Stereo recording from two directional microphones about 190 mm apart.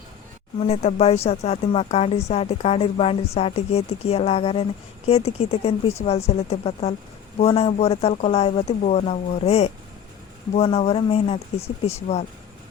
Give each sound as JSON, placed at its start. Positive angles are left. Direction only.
{"t": 0.6, "sound": "speech", "side_deg": 35}